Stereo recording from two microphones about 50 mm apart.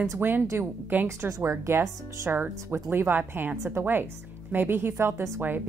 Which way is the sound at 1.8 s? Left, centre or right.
Right.